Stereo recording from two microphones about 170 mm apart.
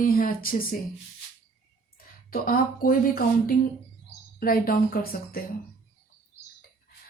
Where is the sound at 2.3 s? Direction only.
60° left (ahead or behind).